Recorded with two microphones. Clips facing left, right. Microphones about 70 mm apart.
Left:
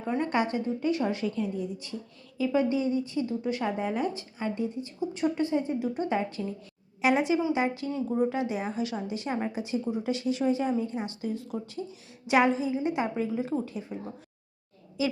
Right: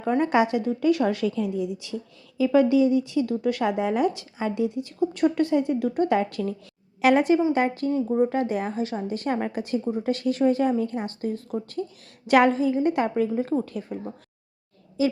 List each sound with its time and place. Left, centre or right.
0.0 s a woman's voice: right
7.0 s a woman's voice: right
9.1 s a woman's voice: right
15.0 s a woman's voice: right